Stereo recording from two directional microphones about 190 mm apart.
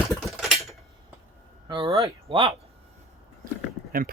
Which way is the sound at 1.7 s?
25° right (ahead or behind).